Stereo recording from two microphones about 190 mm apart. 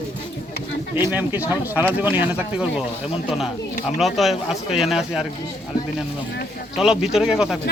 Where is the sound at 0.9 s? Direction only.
10° right (ahead or behind).